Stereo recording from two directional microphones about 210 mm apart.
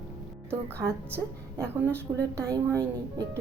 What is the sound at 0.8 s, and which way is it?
A woman's voice, 10° right (ahead or behind).